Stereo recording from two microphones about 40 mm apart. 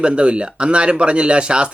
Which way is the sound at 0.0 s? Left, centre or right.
Right.